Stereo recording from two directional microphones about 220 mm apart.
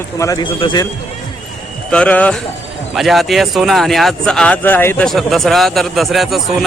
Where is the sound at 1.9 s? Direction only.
5° left (ahead or behind).